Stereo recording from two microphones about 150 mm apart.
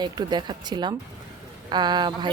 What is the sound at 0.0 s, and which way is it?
Speech, 30° right (ahead or behind).